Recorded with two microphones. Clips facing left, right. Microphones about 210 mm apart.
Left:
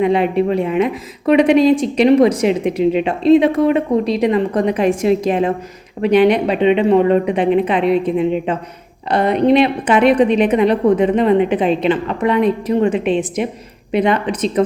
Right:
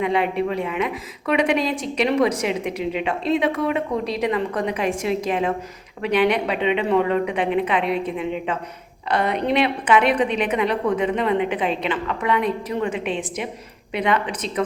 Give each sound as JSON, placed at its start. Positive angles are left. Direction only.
{"t": 0.0, "sound": "a woman's voice", "side_deg": 35}